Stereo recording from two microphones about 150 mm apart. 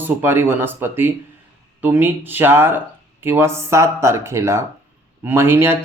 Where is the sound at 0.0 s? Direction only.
15° right (ahead or behind).